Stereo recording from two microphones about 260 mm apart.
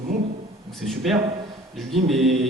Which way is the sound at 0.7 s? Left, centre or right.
Centre.